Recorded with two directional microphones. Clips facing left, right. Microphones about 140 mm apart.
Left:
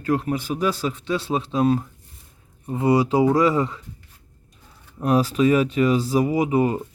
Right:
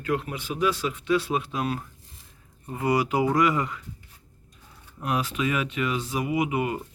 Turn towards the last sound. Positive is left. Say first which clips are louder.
# left 6 dB
turn(degrees=35)  # may be behind; listen again after turning